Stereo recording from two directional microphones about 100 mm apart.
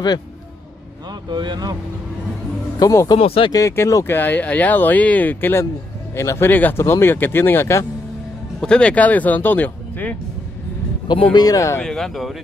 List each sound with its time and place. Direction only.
1.3 s speech: 45° right (ahead or behind)
2.8 s speech: 35° left (ahead or behind)
3.2 s speech: 70° left (ahead or behind)
3.5 s speech: 30° left (ahead or behind)
8.5 s speech: 10° left (ahead or behind)
11.3 s speech: 35° left (ahead or behind)
11.8 s speech: 5° left (ahead or behind)